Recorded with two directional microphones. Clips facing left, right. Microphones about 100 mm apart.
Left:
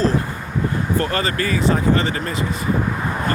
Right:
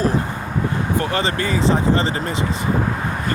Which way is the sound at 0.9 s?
20° right (ahead or behind).